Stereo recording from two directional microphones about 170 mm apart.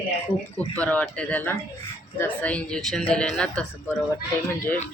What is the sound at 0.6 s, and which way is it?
A man's voice, 10° left (ahead or behind).